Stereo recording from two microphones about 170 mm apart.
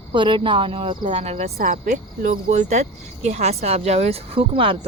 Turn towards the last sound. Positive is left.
turn(degrees=-30)  # may be behind; listen again after turning